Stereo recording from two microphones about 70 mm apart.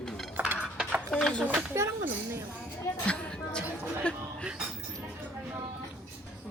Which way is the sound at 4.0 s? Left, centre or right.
Centre.